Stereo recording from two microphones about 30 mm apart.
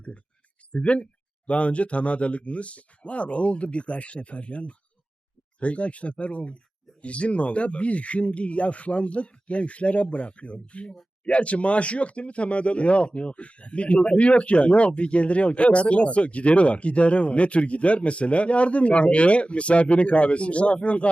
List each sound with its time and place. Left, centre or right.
0.7 s speech: left